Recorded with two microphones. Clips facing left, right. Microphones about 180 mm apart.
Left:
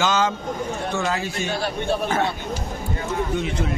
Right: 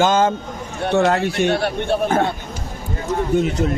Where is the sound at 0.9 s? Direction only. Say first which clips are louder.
Right 12 dB; 65° right (ahead or behind).